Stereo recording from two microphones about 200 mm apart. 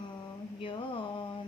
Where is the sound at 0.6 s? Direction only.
25° left (ahead or behind).